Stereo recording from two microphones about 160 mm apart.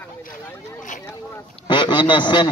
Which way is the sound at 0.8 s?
55° left (ahead or behind).